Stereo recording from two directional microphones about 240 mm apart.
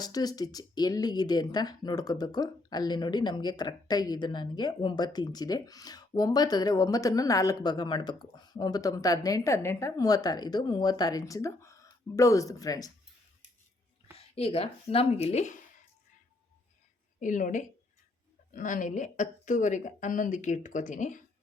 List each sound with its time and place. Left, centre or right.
0.0 s speech: centre
14.2 s speech: left
17.2 s speech: left